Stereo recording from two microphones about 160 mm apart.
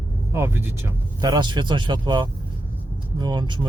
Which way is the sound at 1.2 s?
25° right (ahead or behind).